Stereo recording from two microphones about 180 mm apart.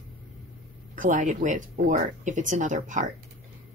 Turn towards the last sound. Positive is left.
turn(degrees=-45)  # may be behind; listen again after turning